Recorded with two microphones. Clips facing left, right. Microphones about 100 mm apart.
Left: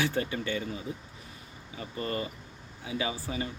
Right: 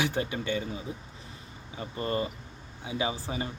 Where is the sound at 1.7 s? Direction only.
25° right (ahead or behind).